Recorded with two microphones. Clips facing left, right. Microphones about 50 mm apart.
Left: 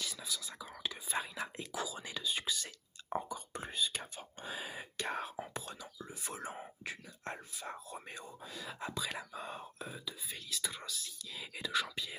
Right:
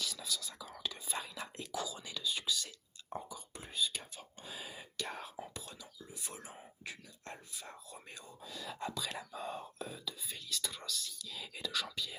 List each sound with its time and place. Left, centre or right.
0.0 s whispering: centre; by 3.2 s left
3.2 s whispering: left
7.6 s a sound: left
8.1 s whispering: left